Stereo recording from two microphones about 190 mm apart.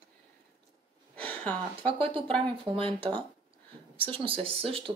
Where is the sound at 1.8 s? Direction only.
30° right (ahead or behind).